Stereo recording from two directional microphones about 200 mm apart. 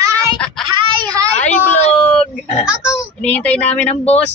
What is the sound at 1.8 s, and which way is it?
Speech, 30° left (ahead or behind).